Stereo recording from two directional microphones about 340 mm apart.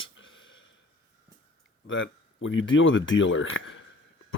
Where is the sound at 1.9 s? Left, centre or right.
Left.